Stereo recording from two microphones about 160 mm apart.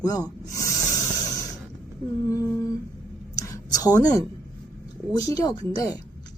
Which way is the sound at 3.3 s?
20° left (ahead or behind).